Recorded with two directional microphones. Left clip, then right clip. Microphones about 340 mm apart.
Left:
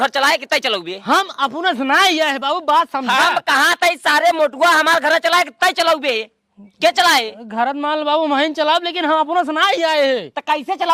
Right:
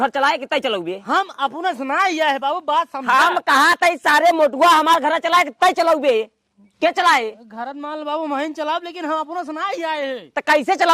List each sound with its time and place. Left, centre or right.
0.0 s speech: centre
1.0 s a man's voice: left
3.1 s speech: right
7.5 s speech: left
8.0 s a man's voice: left
9.6 s a man's voice: left
10.3 s speech: right